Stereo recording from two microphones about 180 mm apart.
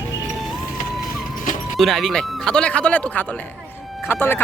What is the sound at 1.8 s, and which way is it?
Speech, centre (ahead or behind).